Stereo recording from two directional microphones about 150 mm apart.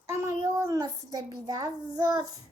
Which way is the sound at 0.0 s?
15° right (ahead or behind).